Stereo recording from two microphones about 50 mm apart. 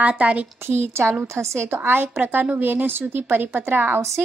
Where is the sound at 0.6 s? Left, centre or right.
Right.